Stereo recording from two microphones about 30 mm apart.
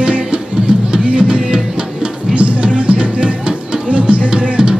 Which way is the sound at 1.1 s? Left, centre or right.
Right.